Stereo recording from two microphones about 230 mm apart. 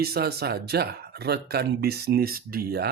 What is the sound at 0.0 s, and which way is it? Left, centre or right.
Speech, right.